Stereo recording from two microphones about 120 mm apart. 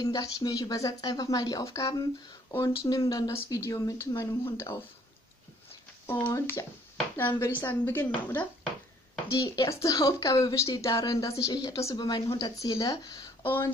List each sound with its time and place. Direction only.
0.0 s speech: 35° left (ahead or behind)
6.0 s speech: 20° left (ahead or behind)
9.3 s speech: 25° left (ahead or behind)
13.4 s speech: 15° left (ahead or behind)